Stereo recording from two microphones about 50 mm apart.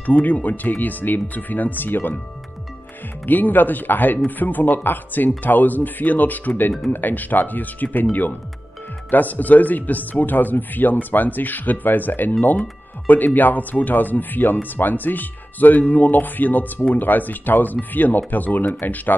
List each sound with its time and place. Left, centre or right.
0.0 s speech: left
3.3 s speech: left